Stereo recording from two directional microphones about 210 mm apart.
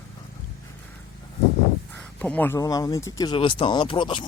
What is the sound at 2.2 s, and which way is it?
Speech, 5° left (ahead or behind).